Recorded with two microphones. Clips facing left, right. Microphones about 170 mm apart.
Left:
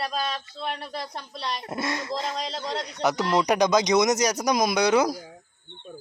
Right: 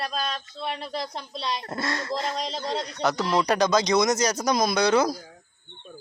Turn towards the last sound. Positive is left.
turn(degrees=15)  # may be behind; listen again after turning